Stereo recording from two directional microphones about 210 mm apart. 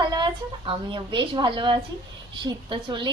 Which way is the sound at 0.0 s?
20° right (ahead or behind).